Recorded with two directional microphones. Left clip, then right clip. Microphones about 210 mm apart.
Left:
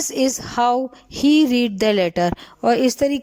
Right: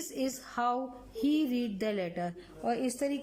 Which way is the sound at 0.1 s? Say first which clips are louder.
Left 13 dB; 35° left (ahead or behind).